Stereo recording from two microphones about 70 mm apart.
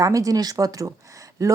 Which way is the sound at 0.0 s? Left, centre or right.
Right.